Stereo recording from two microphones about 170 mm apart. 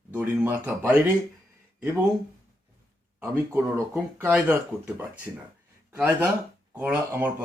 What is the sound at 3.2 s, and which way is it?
Speech, 15° right (ahead or behind).